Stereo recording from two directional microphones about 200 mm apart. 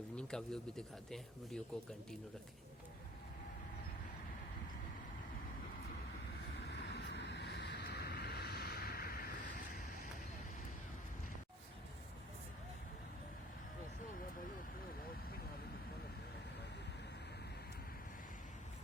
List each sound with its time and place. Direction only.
0.2 s speech: 5° left (ahead or behind)
6.7 s vehicle: 60° left (ahead or behind); by 9.8 s 40° left (ahead or behind)